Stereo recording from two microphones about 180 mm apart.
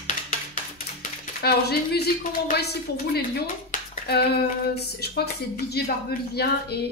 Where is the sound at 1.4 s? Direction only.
65° left (ahead or behind).